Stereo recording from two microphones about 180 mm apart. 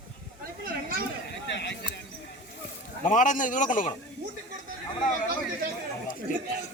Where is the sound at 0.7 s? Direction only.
55° right (ahead or behind).